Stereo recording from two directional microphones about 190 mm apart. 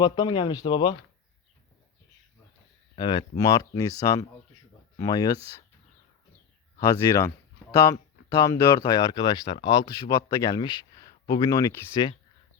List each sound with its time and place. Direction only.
0.0 s speech: 25° left (ahead or behind)
2.9 s speech: 25° left (ahead or behind)
6.7 s speech: 15° left (ahead or behind)
8.4 s speech: 15° left (ahead or behind)